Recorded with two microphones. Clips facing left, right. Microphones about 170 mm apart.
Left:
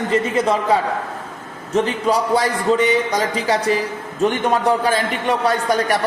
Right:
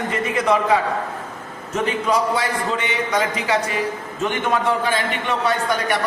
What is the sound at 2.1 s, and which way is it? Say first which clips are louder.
A man's voice: left 3 dB; 40° left (ahead or behind).